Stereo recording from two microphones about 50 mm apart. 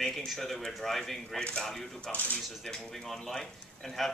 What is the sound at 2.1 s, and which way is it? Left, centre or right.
Speech, left.